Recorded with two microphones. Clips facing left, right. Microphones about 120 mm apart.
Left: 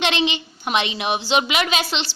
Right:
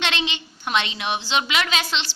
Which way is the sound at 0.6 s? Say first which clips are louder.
Left 2 dB; 15° left (ahead or behind).